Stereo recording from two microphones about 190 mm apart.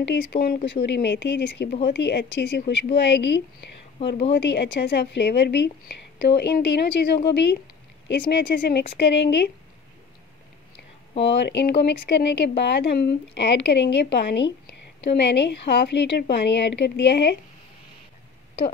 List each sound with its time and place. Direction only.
0.0 s speech: 65° left (ahead or behind)
0.7 s speech: 65° left (ahead or behind)
11.2 s speech: 65° left (ahead or behind)